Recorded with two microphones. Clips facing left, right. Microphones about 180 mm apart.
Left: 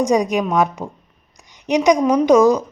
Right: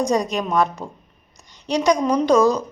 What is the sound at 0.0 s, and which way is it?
A woman's voice, 15° left (ahead or behind).